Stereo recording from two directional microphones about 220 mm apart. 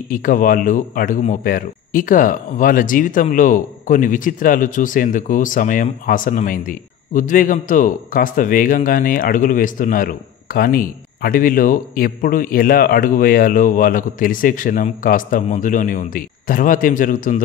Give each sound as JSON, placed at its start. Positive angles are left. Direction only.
{"t": 0.1, "sound": "speech", "side_deg": 40}